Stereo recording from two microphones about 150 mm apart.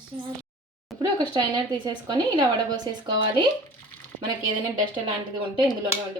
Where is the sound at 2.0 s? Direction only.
30° right (ahead or behind).